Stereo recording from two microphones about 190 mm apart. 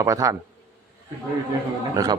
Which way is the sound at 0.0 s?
15° right (ahead or behind).